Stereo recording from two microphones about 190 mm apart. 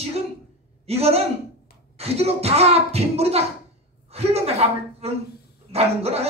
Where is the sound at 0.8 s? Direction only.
30° right (ahead or behind).